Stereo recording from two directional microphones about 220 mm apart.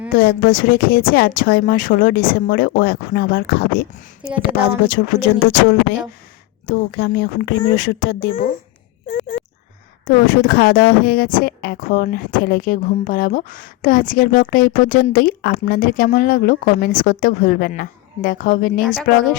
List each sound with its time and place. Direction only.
0.1 s speech: 40° left (ahead or behind)
4.2 s speech: 5° right (ahead or behind)
4.9 s speech: 40° left (ahead or behind)
10.1 s speech: 40° left (ahead or behind)